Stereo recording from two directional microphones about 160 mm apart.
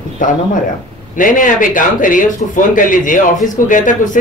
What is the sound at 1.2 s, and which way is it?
Speech, 55° left (ahead or behind).